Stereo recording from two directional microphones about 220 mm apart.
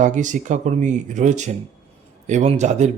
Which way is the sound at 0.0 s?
35° right (ahead or behind).